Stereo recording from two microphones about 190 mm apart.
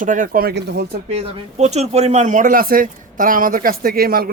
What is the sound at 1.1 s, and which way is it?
Speech, 35° right (ahead or behind).